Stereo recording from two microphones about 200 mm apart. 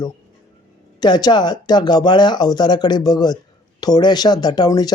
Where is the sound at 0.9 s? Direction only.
20° left (ahead or behind).